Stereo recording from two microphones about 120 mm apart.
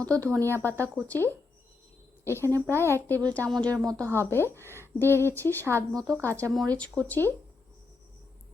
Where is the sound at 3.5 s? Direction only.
5° left (ahead or behind).